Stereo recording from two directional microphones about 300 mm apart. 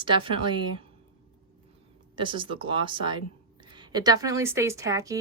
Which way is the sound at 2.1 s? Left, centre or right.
Centre.